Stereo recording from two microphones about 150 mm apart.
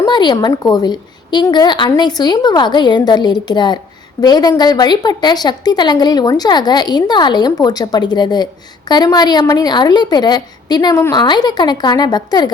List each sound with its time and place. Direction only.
0.0 s a woman's voice: 30° left (ahead or behind)